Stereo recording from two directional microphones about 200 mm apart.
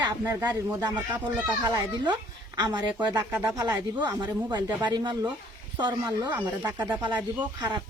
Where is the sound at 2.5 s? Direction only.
20° right (ahead or behind).